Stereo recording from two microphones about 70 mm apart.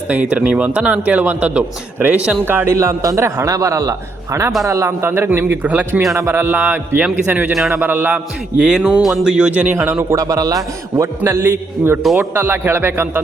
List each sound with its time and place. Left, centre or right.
0.1 s a man's voice: right
2.4 s speech: right
2.7 s a man's voice: right
4.9 s speech: right
5.6 s a man's voice: right
8.1 s a man's voice: centre; by 10.0 s right
10.0 s a man's voice: right
11.2 s speech: right
12.0 s speech: centre
12.3 s speech: right